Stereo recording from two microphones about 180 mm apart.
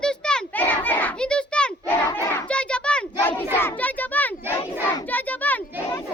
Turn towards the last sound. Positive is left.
turn(degrees=10)  # may be behind; listen again after turning